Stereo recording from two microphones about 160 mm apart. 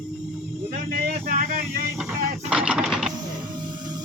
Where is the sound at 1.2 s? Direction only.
60° right (ahead or behind).